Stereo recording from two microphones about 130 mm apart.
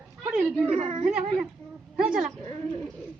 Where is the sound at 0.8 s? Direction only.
50° right (ahead or behind).